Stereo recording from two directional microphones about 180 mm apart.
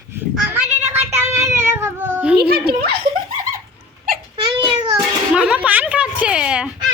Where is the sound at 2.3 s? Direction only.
60° right (ahead or behind).